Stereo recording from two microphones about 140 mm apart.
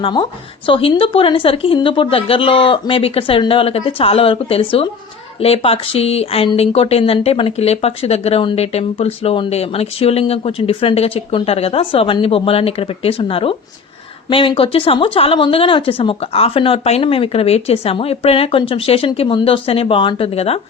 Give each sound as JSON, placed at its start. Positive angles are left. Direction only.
{"t": 0.0, "sound": "speech", "side_deg": 30}